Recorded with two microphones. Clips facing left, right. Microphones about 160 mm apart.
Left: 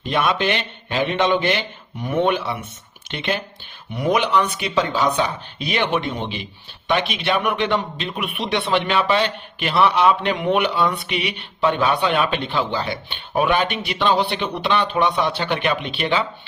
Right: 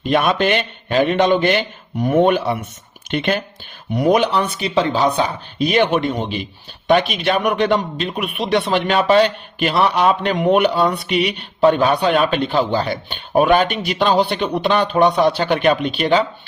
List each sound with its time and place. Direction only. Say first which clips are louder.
0.1 s a man's voice: right 4 dB; 50° right (ahead or behind)